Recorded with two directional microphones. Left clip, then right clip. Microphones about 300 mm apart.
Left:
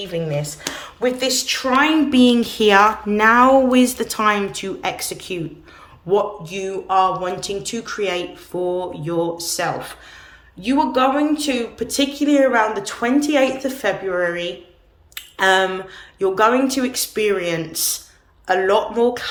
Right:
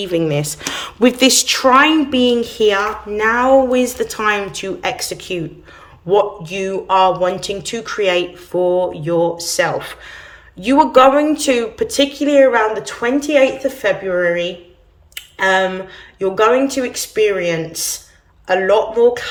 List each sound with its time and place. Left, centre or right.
0.0 s a woman's voice: right; by 19.3 s centre